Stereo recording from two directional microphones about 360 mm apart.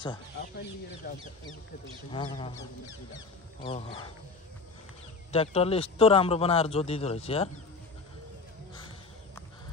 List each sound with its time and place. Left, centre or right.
1.0 s a man's voice: left
3.6 s a man's voice: centre
5.3 s a man's voice: centre